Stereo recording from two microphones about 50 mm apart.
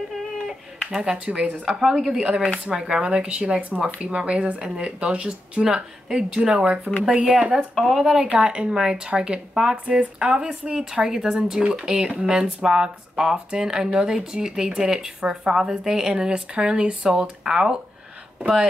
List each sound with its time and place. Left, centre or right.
0.1 s a sound: centre
1.1 s speech: right
1.7 s speech: centre
2.1 s speech: centre
8.3 s speech: right